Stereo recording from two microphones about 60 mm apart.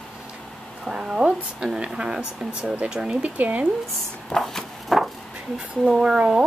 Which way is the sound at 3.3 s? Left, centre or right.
Right.